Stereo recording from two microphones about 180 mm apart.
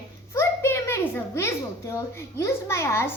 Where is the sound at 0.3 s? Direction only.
15° left (ahead or behind).